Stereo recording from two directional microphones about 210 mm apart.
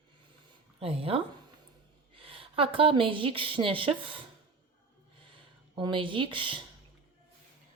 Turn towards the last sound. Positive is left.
turn(degrees=-25)  # may be behind; listen again after turning